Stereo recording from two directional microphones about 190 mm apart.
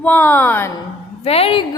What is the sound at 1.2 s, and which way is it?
Speech, 30° left (ahead or behind).